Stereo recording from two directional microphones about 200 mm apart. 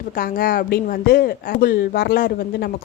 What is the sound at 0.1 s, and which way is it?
Speech, 45° left (ahead or behind).